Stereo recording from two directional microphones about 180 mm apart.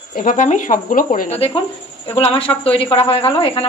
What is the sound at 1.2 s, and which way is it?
Speech, 35° left (ahead or behind).